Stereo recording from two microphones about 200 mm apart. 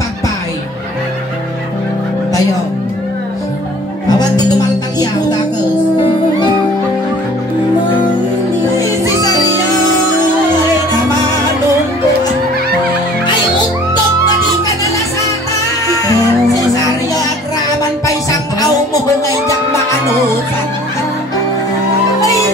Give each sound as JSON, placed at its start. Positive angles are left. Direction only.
{"t": 4.1, "sound": "music", "side_deg": 20}
{"t": 8.6, "sound": "music", "side_deg": 15}